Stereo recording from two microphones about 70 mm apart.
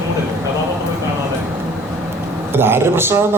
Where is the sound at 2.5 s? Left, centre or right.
Right.